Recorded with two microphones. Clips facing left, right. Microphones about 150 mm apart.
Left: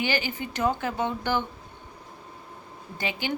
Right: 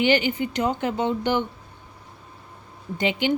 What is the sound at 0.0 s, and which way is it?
Speech, 20° right (ahead or behind).